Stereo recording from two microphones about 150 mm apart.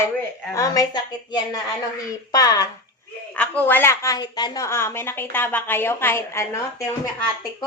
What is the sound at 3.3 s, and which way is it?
A woman's voice, 10° left (ahead or behind).